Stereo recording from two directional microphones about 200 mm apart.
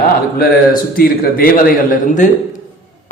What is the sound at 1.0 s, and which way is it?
A man's voice, 50° left (ahead or behind).